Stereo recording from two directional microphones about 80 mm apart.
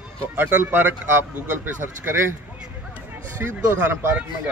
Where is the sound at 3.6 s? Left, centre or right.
Right.